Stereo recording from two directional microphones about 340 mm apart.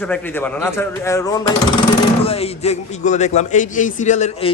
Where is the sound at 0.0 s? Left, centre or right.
Centre.